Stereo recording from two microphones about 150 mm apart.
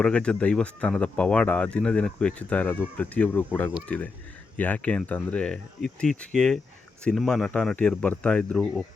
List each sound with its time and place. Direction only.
0.0 s speech: 5° left (ahead or behind)